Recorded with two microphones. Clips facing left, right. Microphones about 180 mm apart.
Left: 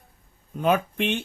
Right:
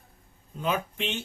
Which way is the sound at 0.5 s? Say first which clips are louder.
Left 7 dB; 55° left (ahead or behind).